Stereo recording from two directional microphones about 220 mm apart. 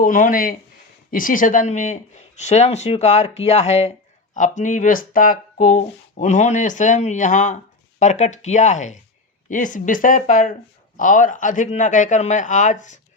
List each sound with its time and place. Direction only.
0.0 s speech: 40° left (ahead or behind)